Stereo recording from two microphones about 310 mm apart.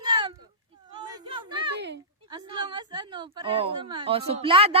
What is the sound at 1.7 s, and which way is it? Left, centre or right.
Speech, right.